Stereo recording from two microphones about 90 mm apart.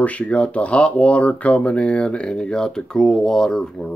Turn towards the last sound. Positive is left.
turn(degrees=5)  # may be behind; listen again after turning